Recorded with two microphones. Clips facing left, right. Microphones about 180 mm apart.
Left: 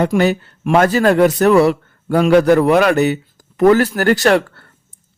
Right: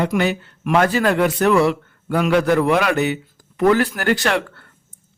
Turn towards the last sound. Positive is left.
turn(degrees=40)  # may be behind; listen again after turning